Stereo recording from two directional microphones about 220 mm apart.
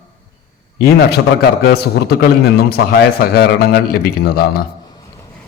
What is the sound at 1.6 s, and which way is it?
A man's voice, 45° left (ahead or behind).